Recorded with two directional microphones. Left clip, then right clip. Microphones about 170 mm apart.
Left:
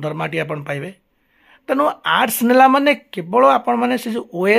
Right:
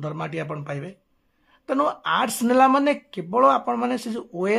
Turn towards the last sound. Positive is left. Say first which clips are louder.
# left 7 dB
turn(degrees=25)  # may be behind; listen again after turning